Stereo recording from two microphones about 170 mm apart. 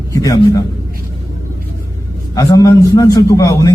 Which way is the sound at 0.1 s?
20° left (ahead or behind).